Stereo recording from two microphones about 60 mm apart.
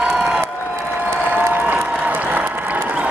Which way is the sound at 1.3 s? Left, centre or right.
Right.